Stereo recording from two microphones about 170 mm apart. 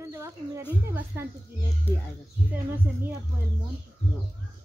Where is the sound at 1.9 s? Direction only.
10° left (ahead or behind).